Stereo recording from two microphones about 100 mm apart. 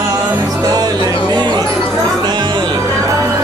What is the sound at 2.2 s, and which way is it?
Music, 45° right (ahead or behind).